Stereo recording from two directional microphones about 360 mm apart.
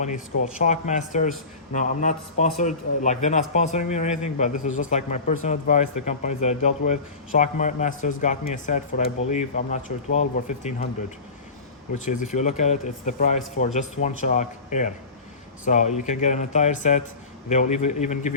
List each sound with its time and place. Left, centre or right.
0.6 s speech: centre
12.0 s speech: centre